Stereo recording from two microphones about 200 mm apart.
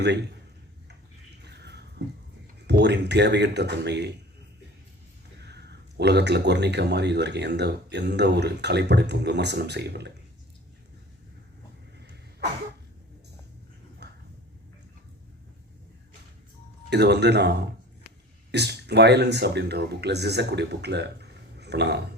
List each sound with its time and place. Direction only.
0.0 s speech: 60° right (ahead or behind)
1.5 s a sound: 55° right (ahead or behind)
2.6 s speech: 60° right (ahead or behind)
5.4 s speech: 55° right (ahead or behind)
14.0 s a sound: 55° right (ahead or behind)
16.9 s speech: 55° right (ahead or behind)